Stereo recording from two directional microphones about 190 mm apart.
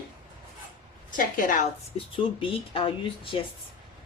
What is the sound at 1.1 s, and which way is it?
Speech, 45° left (ahead or behind).